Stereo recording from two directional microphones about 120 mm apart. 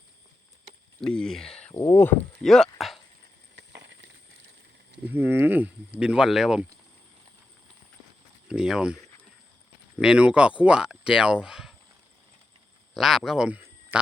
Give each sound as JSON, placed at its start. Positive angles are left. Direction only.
{"t": 1.0, "sound": "speech", "side_deg": 5}
{"t": 1.7, "sound": "speech", "side_deg": 20}
{"t": 2.4, "sound": "speech", "side_deg": 5}
{"t": 5.1, "sound": "speech", "side_deg": -15}
{"t": 8.4, "sound": "speech", "side_deg": -5}
{"t": 10.0, "sound": "speech", "side_deg": -10}
{"t": 12.9, "sound": "speech", "side_deg": 0}
{"t": 13.9, "sound": "a sound", "side_deg": -10}